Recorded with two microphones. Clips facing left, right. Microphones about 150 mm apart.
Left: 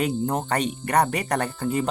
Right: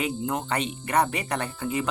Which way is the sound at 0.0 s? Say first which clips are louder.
Left 4 dB; 40° left (ahead or behind).